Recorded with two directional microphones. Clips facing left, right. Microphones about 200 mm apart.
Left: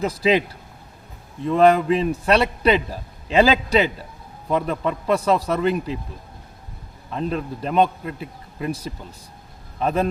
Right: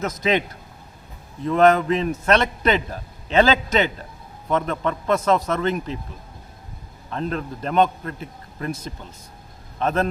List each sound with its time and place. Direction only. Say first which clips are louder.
0.0 s speech: left 3 dB; 30° left (ahead or behind)
1.5 s a man's voice: left 1 dB; centre (ahead or behind)
7.1 s a man's voice: left 1 dB; 5° left (ahead or behind)
9.7 s a man's voice: left 1 dB; 5° left (ahead or behind)